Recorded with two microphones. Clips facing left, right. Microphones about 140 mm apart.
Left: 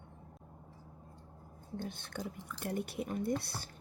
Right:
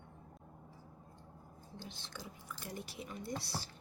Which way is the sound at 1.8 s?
55° left (ahead or behind).